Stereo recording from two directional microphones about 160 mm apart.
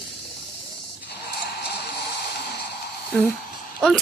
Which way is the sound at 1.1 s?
90° left.